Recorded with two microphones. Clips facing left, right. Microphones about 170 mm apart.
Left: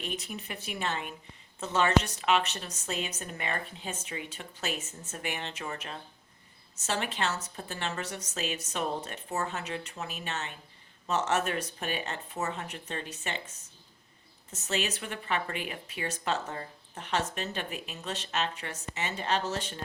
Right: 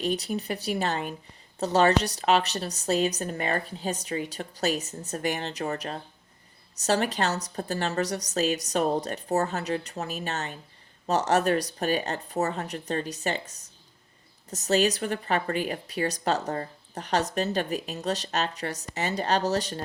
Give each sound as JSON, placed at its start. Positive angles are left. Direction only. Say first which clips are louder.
{"t": 0.0, "sound": "a woman's voice", "louder": "right 10 dB", "side_deg": -35}